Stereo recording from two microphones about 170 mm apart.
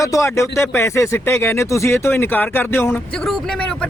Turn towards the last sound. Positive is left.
turn(degrees=5)  # may be behind; listen again after turning